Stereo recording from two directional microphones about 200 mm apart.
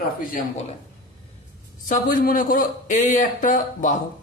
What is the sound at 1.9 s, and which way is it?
Speech, 45° left (ahead or behind).